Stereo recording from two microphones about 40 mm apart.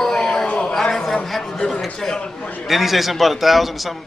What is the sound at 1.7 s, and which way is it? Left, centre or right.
A man's voice, centre.